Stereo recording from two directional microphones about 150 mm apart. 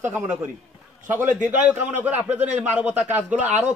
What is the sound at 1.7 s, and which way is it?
A man's voice, 10° right (ahead or behind).